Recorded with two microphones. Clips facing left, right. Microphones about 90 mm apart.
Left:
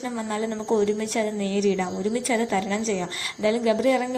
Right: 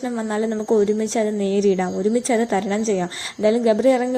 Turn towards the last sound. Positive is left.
turn(degrees=-35)  # may be behind; listen again after turning